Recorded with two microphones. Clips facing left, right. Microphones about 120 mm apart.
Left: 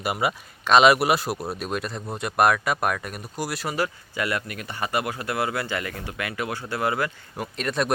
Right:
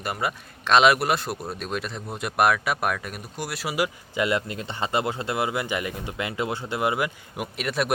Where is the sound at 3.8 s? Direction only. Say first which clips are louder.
Right 4 dB; 20° right (ahead or behind).